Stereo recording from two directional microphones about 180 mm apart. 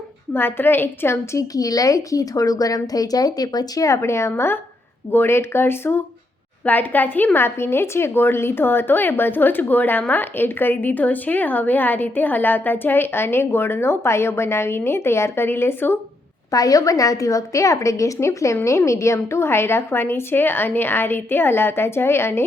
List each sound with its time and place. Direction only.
0.3 s a woman's voice: 10° left (ahead or behind)